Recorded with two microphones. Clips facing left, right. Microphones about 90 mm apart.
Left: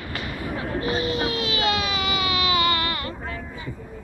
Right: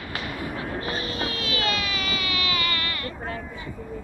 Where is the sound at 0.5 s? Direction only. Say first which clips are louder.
Left 7 dB; 20° left (ahead or behind).